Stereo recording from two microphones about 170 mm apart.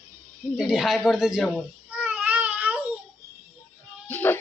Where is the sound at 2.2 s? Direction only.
10° right (ahead or behind).